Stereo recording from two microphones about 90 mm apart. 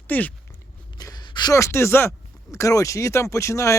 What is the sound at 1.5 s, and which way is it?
Speech, 30° left (ahead or behind).